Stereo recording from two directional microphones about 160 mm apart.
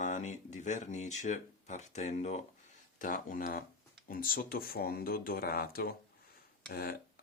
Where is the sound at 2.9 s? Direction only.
55° left (ahead or behind).